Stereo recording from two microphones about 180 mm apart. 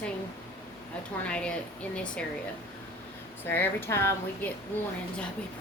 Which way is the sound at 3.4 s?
10° left (ahead or behind).